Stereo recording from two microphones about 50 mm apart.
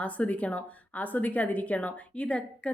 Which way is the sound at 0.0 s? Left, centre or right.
Left.